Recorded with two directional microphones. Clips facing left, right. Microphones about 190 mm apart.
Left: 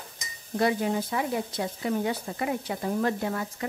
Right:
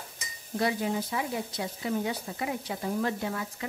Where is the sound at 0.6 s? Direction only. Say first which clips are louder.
Left 3 dB; 50° left (ahead or behind).